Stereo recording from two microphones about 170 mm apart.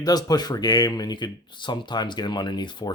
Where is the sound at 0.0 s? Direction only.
25° left (ahead or behind).